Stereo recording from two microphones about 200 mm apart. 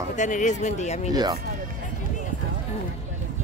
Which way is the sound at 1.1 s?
20° right (ahead or behind).